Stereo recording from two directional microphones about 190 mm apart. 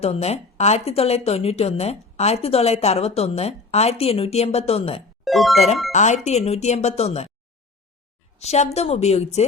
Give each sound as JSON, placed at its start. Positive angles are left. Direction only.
{"t": 0.0, "sound": "speech", "side_deg": 35}
{"t": 5.2, "sound": "speech", "side_deg": 0}
{"t": 5.9, "sound": "speech", "side_deg": 40}
{"t": 8.4, "sound": "speech", "side_deg": 35}